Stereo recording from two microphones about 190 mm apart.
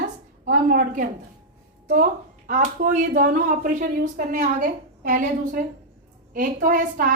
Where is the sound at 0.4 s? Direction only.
45° right (ahead or behind).